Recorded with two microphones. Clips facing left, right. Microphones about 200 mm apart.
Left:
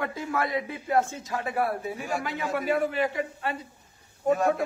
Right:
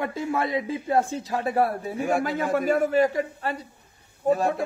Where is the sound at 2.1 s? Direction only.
50° right (ahead or behind).